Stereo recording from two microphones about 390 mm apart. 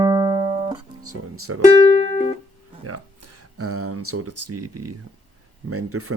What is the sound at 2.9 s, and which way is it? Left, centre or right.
Speech, right.